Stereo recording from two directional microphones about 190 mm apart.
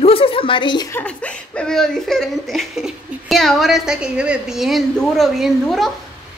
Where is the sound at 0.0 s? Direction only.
30° left (ahead or behind).